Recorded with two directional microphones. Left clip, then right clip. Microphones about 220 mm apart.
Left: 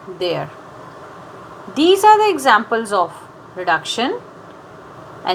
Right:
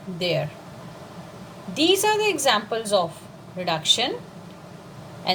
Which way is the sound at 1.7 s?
20° left (ahead or behind).